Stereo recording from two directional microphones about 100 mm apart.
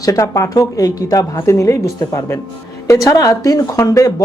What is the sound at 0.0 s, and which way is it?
Speech, 35° left (ahead or behind).